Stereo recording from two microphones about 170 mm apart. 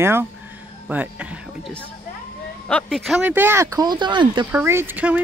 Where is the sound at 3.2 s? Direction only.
10° right (ahead or behind); by 4.5 s 25° right (ahead or behind).